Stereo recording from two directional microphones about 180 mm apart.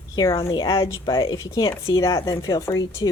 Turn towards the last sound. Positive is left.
turn(degrees=20)  # may be behind; listen again after turning